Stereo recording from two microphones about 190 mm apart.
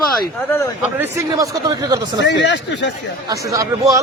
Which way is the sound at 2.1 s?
65° left (ahead or behind).